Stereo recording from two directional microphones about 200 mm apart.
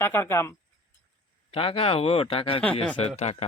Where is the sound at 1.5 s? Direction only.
30° left (ahead or behind).